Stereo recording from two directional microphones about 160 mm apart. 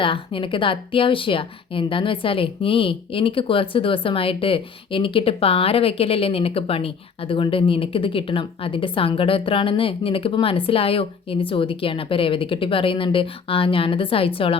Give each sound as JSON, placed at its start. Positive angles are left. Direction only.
{"t": 0.0, "sound": "speech", "side_deg": 35}